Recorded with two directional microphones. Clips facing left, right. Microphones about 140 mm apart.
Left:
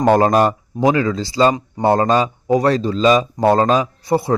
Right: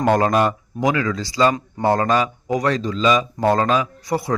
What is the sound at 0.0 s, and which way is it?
Speech, 35° left (ahead or behind).